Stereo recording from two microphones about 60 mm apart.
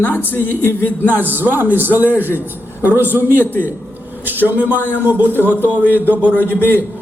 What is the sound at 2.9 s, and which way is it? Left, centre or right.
A man's voice, right.